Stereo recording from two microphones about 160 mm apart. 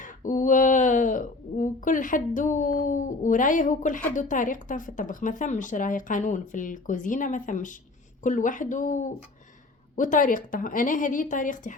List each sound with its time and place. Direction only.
0.0 s a woman's voice: 55° left (ahead or behind)